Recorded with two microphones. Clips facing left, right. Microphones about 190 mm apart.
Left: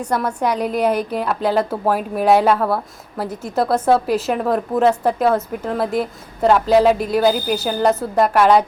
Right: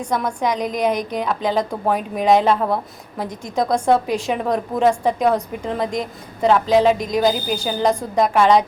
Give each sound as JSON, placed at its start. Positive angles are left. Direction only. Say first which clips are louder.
{"t": 0.0, "sound": "a woman's voice", "louder": "left 1 dB", "side_deg": 10}
{"t": 2.6, "sound": "a woman's voice", "louder": "left 1 dB", "side_deg": -20}
{"t": 3.2, "sound": "a woman's voice", "louder": "left 2 dB", "side_deg": 5}